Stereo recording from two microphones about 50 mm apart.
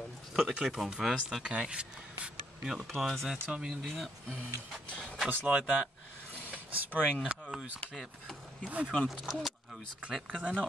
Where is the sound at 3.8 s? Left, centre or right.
Centre.